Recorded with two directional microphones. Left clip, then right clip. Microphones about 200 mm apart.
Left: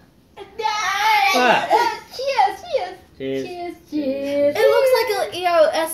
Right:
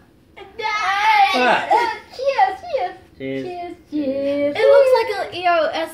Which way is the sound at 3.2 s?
5° left (ahead or behind).